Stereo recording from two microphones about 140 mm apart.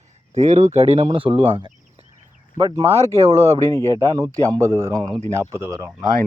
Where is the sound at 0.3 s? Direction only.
55° right (ahead or behind).